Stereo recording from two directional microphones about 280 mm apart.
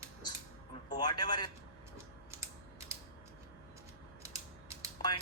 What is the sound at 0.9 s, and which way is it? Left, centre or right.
Speech, centre.